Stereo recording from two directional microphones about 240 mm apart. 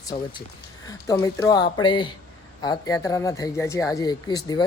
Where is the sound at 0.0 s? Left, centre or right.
Centre.